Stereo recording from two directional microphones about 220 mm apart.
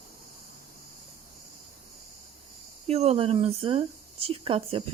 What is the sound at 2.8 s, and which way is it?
Speech, 30° right (ahead or behind).